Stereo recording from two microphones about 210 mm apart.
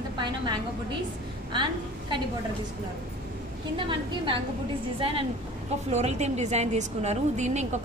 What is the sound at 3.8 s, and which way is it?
A woman's voice, 25° right (ahead or behind).